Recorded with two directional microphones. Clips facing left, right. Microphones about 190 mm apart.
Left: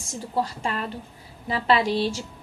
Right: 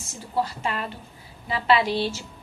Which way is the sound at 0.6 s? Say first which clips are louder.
Left 1 dB; 40° left (ahead or behind).